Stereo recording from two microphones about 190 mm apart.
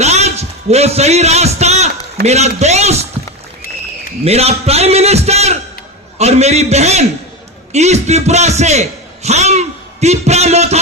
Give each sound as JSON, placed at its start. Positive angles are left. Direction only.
{"t": 0.0, "sound": "a sound", "side_deg": -35}
{"t": 2.2, "sound": "a man's voice", "side_deg": -35}
{"t": 4.2, "sound": "a man's voice", "side_deg": -35}